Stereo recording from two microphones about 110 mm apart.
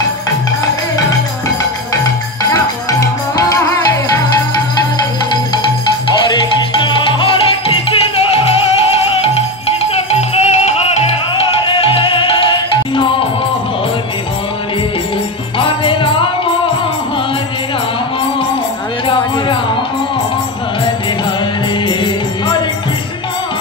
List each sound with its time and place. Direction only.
2.5 s music: 35° left (ahead or behind)
6.8 s music: 50° left (ahead or behind); by 11.1 s 70° left (ahead or behind)
11.7 s music: 60° left (ahead or behind)
15.6 s music: 50° left (ahead or behind)
19.0 s music: 50° left (ahead or behind)
21.8 s music: 45° left (ahead or behind)